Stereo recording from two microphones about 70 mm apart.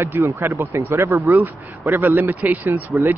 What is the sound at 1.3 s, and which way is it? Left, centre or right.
Speech, right.